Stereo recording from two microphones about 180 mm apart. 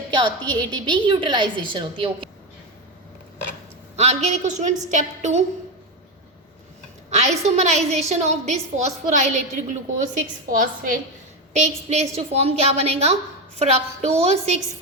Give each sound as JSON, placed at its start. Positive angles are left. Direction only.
{"t": 0.1, "sound": "a woman's voice", "side_deg": -25}
{"t": 3.9, "sound": "a woman's voice", "side_deg": -35}
{"t": 7.1, "sound": "a woman's voice", "side_deg": -40}
{"t": 10.5, "sound": "a woman's voice", "side_deg": -50}